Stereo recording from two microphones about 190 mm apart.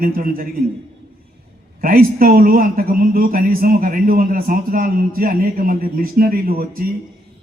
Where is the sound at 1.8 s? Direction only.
50° right (ahead or behind).